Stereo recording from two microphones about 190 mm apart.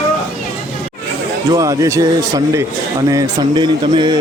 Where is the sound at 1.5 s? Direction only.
15° right (ahead or behind).